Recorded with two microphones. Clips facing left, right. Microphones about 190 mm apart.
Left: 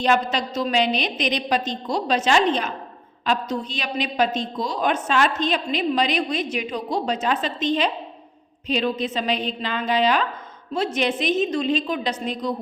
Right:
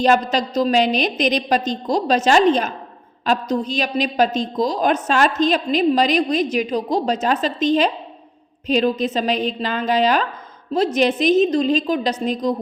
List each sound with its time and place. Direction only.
0.0 s a woman's voice: 40° right (ahead or behind)